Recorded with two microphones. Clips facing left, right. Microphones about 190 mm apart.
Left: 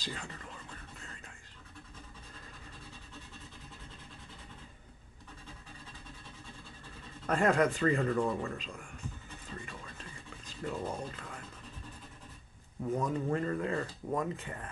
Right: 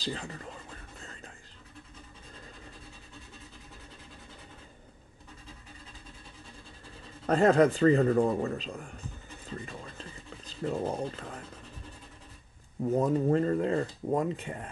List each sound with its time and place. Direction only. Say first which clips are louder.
0.0 s speech: right 6 dB; 35° right (ahead or behind)
7.2 s speech: right 6 dB; 35° right (ahead or behind)
10.4 s speech: right 6 dB; 30° right (ahead or behind)
12.9 s speech: right 7 dB; 35° right (ahead or behind)